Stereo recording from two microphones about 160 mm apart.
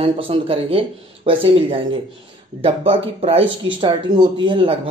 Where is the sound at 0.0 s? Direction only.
35° right (ahead or behind).